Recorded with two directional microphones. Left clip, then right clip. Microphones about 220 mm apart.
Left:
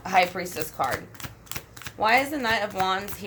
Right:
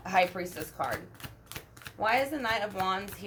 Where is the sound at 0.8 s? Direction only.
15° left (ahead or behind).